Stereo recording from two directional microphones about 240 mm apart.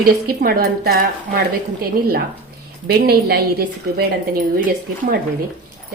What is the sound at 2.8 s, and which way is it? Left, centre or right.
A woman's voice, right.